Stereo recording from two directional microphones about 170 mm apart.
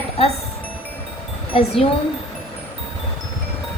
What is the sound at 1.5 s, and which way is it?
Speech, 35° left (ahead or behind).